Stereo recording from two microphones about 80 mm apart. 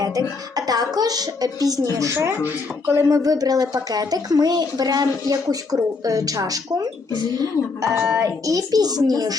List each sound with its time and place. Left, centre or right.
0.5 s speech: right
2.4 s a sound: right
3.2 s speech: right
7.9 s speech: right